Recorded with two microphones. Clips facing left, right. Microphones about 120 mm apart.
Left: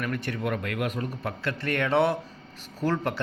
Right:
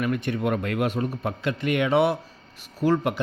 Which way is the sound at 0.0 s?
20° right (ahead or behind).